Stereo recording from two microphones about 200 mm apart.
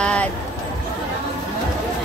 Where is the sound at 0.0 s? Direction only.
5° left (ahead or behind).